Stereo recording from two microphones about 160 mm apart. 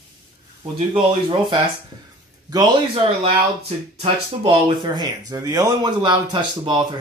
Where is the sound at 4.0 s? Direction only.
30° right (ahead or behind).